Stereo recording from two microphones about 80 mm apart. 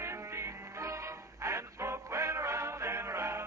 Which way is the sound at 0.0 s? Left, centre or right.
Right.